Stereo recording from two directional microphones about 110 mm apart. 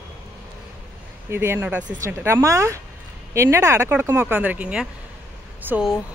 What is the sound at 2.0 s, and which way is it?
A woman's voice, 25° right (ahead or behind).